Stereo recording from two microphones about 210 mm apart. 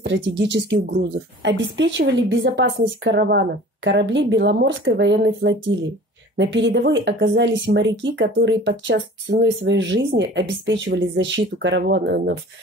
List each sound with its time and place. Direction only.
0.0 s speech: 55° right (ahead or behind)